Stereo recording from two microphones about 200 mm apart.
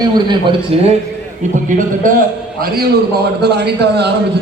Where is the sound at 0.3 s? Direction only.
25° right (ahead or behind).